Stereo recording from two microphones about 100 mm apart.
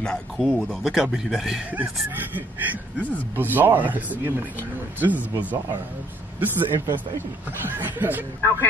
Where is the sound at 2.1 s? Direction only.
20° right (ahead or behind).